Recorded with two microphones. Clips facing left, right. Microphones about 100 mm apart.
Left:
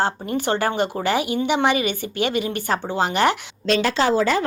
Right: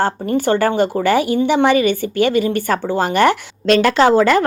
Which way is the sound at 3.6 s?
65° right (ahead or behind).